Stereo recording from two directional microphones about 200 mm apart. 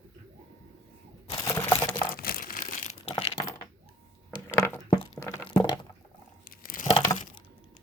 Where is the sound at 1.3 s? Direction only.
15° left (ahead or behind).